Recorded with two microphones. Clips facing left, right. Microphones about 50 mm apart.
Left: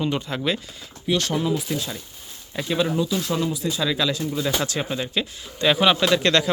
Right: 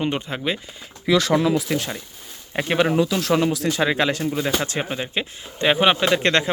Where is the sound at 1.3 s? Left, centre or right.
Right.